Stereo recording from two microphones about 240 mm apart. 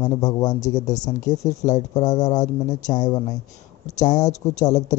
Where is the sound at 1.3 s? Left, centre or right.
Left.